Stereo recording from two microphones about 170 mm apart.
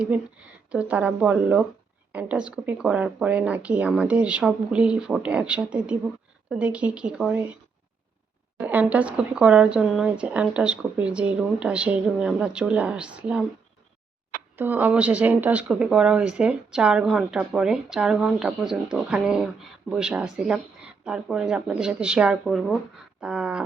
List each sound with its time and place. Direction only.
0.7 s speech: 5° right (ahead or behind)
8.5 s speech: 10° right (ahead or behind)
14.5 s speech: 10° right (ahead or behind)